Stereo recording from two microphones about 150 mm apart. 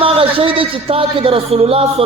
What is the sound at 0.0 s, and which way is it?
Music, 40° right (ahead or behind).